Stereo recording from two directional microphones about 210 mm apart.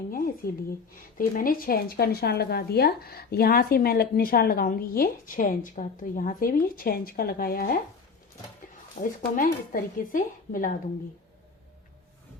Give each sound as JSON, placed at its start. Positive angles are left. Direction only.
{"t": 0.1, "sound": "a sound", "side_deg": 45}
{"t": 1.2, "sound": "speech", "side_deg": 45}
{"t": 9.0, "sound": "speech", "side_deg": 35}